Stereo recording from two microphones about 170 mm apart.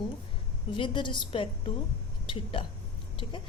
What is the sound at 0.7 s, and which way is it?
A woman's voice, 30° left (ahead or behind).